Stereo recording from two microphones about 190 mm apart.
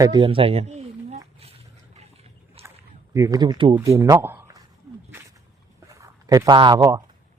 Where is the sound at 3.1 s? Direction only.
20° right (ahead or behind).